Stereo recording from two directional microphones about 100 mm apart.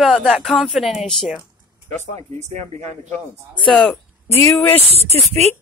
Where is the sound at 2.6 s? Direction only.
90° right.